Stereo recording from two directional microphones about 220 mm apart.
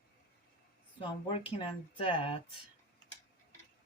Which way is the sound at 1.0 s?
25° left (ahead or behind).